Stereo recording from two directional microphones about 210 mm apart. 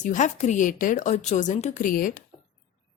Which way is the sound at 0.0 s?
35° left (ahead or behind).